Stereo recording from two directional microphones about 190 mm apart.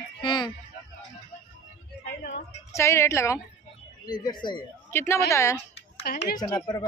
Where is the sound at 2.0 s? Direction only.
55° left (ahead or behind).